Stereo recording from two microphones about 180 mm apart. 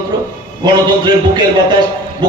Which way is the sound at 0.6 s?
25° right (ahead or behind).